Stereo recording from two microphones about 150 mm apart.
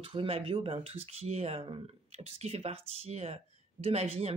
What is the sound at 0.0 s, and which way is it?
Speech, 40° right (ahead or behind).